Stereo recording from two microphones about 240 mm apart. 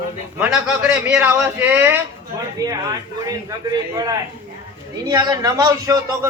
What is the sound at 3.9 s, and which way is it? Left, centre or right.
Speech, centre.